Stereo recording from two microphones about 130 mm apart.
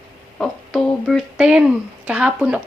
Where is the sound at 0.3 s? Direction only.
5° left (ahead or behind).